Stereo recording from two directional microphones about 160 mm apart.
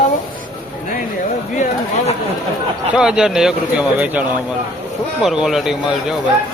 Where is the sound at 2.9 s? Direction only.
5° right (ahead or behind).